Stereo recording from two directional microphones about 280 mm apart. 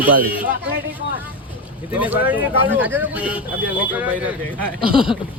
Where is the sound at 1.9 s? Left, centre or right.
Centre.